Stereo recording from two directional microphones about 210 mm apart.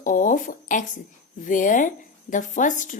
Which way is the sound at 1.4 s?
40° left (ahead or behind).